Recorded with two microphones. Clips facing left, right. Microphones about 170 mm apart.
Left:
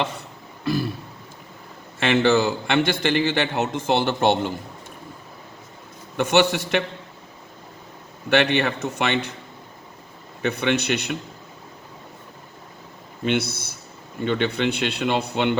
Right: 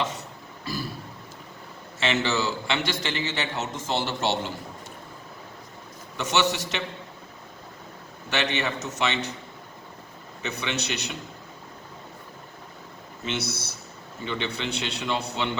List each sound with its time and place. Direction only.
0.6 s a sound: 60° left (ahead or behind)
2.0 s a man's voice: 55° left (ahead or behind)
6.1 s a man's voice: 55° left (ahead or behind)
8.3 s a man's voice: 60° left (ahead or behind)
10.4 s a man's voice: 55° left (ahead or behind)
13.2 s a man's voice: 55° left (ahead or behind)